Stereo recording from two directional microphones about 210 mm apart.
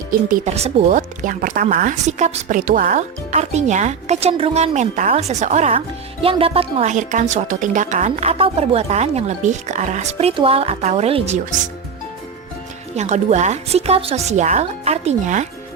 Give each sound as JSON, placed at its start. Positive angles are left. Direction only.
{"t": 0.3, "sound": "a woman's voice", "side_deg": -35}
{"t": 13.0, "sound": "a woman's voice", "side_deg": -35}